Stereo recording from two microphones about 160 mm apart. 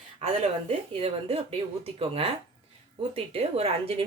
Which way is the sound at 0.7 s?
40° right (ahead or behind).